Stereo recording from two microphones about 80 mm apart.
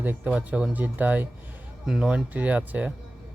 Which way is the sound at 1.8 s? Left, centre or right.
Centre.